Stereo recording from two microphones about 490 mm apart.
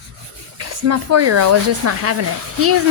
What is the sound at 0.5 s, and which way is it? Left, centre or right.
A woman's voice, right.